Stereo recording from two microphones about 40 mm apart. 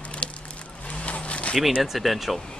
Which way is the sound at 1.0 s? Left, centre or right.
Left.